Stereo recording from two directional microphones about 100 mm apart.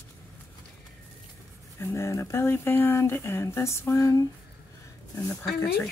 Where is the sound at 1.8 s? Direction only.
30° left (ahead or behind).